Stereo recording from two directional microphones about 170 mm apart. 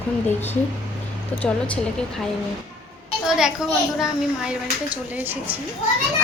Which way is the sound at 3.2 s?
5° right (ahead or behind).